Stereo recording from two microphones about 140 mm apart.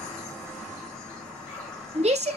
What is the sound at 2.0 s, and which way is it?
Speech, 50° right (ahead or behind).